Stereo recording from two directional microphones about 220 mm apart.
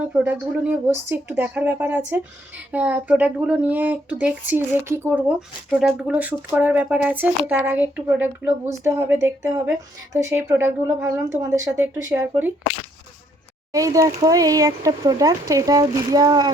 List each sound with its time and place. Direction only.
0.0 s speech: 5° right (ahead or behind)
13.7 s speech: 15° right (ahead or behind)